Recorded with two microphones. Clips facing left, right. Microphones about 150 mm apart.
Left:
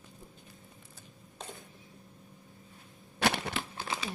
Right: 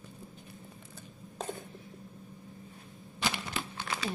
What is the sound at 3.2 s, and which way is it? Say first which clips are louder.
Crushing: left 5 dB; 70° left (ahead or behind).